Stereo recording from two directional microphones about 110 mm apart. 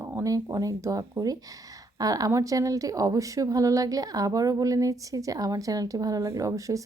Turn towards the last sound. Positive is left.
turn(degrees=-30)  # may be behind; listen again after turning